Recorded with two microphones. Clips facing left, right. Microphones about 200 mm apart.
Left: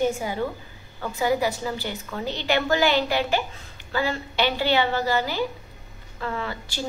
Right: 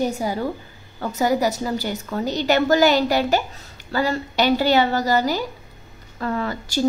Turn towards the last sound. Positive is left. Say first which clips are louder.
# right 7 dB
turn(degrees=-45)  # may be behind; listen again after turning